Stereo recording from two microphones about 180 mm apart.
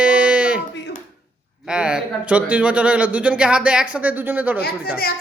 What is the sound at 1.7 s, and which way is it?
Speech, 5° right (ahead or behind).